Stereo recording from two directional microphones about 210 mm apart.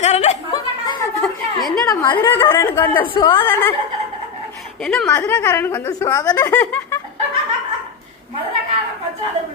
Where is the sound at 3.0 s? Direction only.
20° left (ahead or behind).